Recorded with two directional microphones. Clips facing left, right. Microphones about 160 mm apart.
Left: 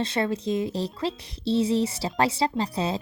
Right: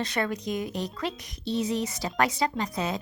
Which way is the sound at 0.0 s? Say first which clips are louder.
Left 3 dB; 25° left (ahead or behind).